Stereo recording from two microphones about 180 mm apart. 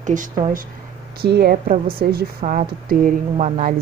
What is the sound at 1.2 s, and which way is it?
Speech, 65° right (ahead or behind).